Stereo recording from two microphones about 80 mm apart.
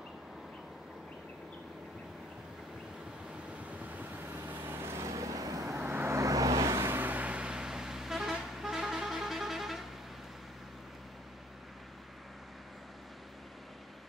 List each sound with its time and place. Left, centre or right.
3.8 s vehicle: right
5.8 s vehicle: right
7.0 s vehicle: right; by 9.8 s centre